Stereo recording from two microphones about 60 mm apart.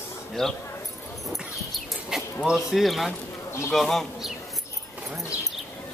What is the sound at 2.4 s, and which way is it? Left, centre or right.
Speech, centre.